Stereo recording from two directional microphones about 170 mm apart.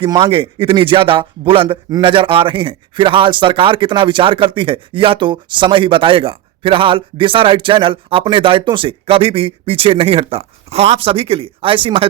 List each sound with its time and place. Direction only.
0.0 s speech: 30° right (ahead or behind)